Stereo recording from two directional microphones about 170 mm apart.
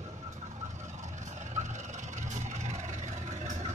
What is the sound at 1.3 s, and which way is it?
Vehicle, 45° right (ahead or behind).